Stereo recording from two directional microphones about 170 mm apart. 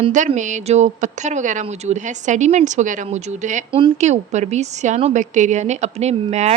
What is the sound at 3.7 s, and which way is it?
Speech, 30° right (ahead or behind).